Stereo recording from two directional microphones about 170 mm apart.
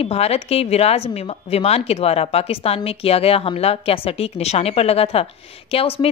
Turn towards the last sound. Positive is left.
turn(degrees=35)  # may be behind; listen again after turning